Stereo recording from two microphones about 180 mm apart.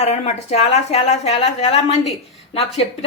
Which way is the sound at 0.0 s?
35° left (ahead or behind).